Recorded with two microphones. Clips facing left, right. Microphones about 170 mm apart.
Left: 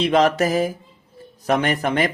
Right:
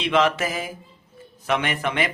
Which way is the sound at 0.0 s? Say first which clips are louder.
Left 4 dB; 40° left (ahead or behind).